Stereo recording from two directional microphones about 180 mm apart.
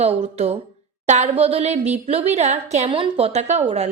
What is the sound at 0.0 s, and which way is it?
Speech, 35° right (ahead or behind).